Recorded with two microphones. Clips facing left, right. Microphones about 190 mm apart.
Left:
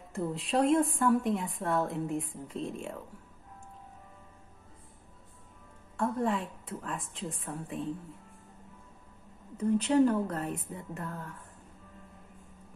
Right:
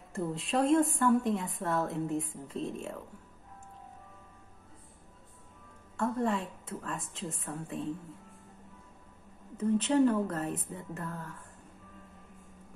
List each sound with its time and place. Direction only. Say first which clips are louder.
0.1 s a woman's voice: left 1 dB; centre (ahead or behind)
6.1 s a woman's voice: even; centre (ahead or behind)
9.6 s speech: left 1 dB; 35° left (ahead or behind)
10.5 s a woman's voice: even; centre (ahead or behind)
11.1 s a woman's voice: even; 30° left (ahead or behind)